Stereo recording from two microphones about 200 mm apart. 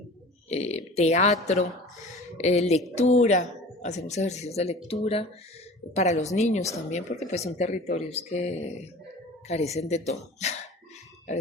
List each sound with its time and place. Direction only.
0.4 s a woman's voice: 30° left (ahead or behind)